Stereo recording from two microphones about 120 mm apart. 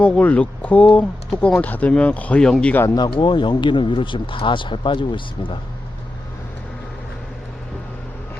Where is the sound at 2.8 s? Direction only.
35° left (ahead or behind).